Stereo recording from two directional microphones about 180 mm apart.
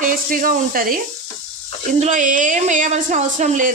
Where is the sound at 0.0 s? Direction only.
50° right (ahead or behind).